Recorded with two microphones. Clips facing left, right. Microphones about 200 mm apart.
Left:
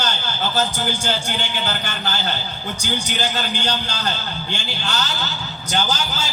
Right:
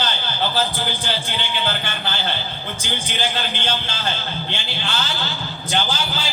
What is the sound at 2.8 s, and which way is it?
A man's voice, 45° left (ahead or behind).